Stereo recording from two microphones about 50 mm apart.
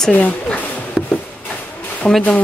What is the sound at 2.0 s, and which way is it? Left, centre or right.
Speech, left.